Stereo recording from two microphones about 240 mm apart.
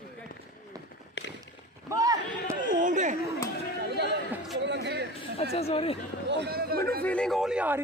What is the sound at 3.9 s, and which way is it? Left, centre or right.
Chatter, right.